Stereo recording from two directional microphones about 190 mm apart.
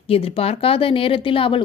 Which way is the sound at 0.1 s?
30° left (ahead or behind).